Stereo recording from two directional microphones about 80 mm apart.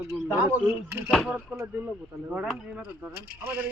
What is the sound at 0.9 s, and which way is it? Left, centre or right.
Speech, right.